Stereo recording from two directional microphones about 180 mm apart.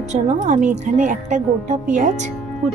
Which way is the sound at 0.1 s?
40° right (ahead or behind).